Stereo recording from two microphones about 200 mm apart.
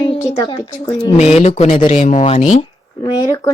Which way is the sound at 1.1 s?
35° left (ahead or behind).